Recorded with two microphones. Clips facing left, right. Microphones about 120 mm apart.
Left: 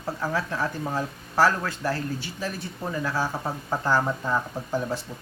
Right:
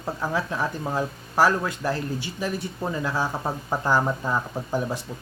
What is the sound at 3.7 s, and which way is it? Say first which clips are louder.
Speech: right 1 dB; 15° right (ahead or behind).